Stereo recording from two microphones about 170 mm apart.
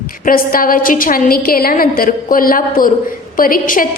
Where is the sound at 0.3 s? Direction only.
55° left (ahead or behind).